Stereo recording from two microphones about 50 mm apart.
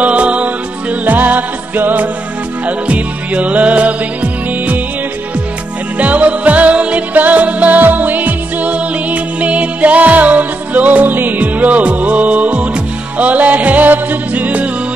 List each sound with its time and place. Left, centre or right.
0.0 s music: right
1.0 s music: right
2.9 s music: right
5.9 s music: right